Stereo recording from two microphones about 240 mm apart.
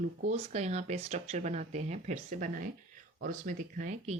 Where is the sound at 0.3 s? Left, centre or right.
Right.